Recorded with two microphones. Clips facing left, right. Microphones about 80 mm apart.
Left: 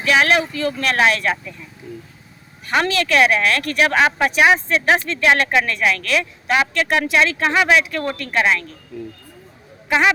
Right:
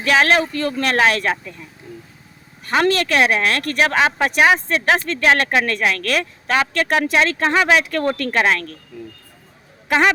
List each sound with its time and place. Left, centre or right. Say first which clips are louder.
0.0 s speech: right 1 dB; right
2.6 s speech: right 2 dB; right